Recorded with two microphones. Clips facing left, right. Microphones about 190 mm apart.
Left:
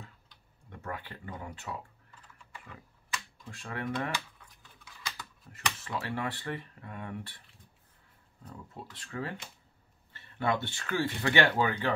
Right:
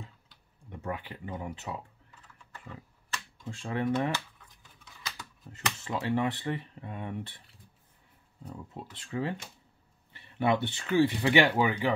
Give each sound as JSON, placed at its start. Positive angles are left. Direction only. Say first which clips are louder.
{"t": 0.3, "sound": "tick-tock", "louder": "right 4 dB", "side_deg": -20}
{"t": 3.4, "sound": "speech", "louder": "right 7 dB", "side_deg": -25}
{"t": 5.5, "sound": "speech", "louder": "right 2 dB", "side_deg": -20}
{"t": 8.5, "sound": "speech", "louder": "right 3 dB", "side_deg": -20}